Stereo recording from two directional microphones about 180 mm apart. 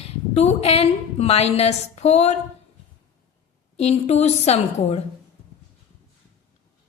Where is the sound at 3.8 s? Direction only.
35° left (ahead or behind).